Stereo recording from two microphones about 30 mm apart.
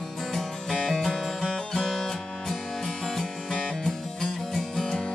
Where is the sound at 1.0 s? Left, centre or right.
Centre.